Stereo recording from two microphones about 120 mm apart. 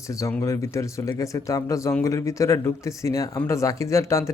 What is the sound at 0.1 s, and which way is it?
Speech, 25° left (ahead or behind).